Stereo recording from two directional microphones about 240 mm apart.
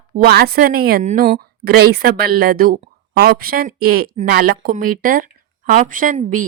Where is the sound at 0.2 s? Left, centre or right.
Right.